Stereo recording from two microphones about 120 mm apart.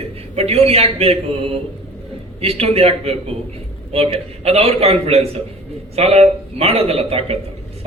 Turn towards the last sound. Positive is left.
turn(degrees=-55)  # may be behind; listen again after turning